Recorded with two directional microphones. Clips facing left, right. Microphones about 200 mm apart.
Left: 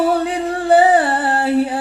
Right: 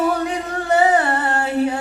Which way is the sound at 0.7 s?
30° left (ahead or behind).